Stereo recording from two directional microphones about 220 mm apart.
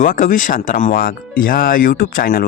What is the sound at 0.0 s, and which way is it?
Speech, 35° left (ahead or behind).